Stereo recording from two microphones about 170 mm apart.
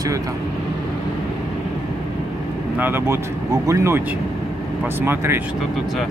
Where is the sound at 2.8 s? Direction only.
15° right (ahead or behind).